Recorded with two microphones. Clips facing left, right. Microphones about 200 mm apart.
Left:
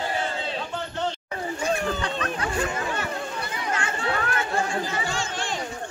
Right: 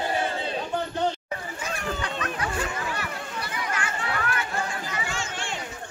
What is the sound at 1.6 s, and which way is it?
Chatter, 30° left (ahead or behind).